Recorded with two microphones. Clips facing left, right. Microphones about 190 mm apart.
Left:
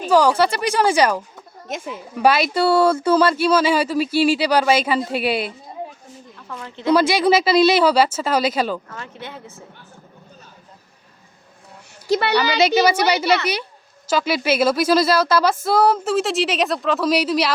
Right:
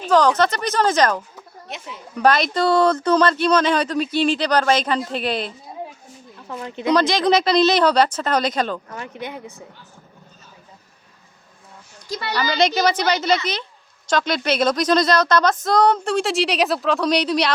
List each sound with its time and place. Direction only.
0.1 s speech: 10° left (ahead or behind)
1.6 s speech: 50° left (ahead or behind)
2.1 s speech: 5° left (ahead or behind)
6.7 s speech: 15° right (ahead or behind)
6.9 s speech: 10° left (ahead or behind)
8.9 s speech: 15° right (ahead or behind)
12.0 s a woman's voice: 70° left (ahead or behind)
12.5 s speech: 5° left (ahead or behind)